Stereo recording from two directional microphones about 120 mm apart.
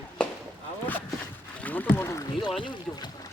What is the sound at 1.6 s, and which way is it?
Rowboat, 15° left (ahead or behind).